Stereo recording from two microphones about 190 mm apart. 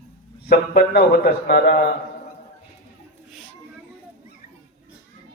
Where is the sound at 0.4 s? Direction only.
55° left (ahead or behind).